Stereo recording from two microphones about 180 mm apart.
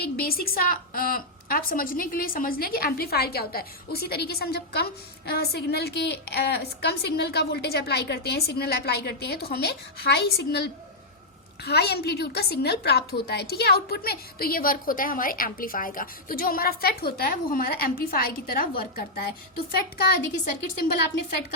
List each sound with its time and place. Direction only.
0.0 s speech: 60° left (ahead or behind)